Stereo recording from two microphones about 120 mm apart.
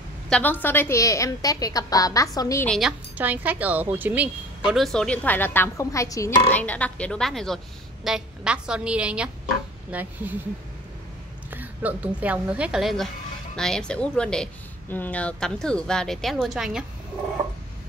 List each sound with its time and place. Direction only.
0.3 s a woman's voice: 15° left (ahead or behind)
3.2 s a woman's voice: 15° right (ahead or behind)
4.7 s a woman's voice: 5° left (ahead or behind); by 6.3 s 25° left (ahead or behind)
6.5 s a woman's voice: 10° left (ahead or behind); by 10.3 s 15° right (ahead or behind)
11.5 s a woman's voice: 15° right (ahead or behind)